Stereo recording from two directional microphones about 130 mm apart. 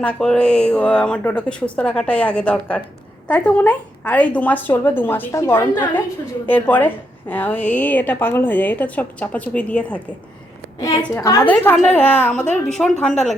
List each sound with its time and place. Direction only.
0.0 s a woman's voice: 5° left (ahead or behind)
10.8 s a woman's voice: 25° left (ahead or behind)
11.4 s a woman's voice: 15° left (ahead or behind)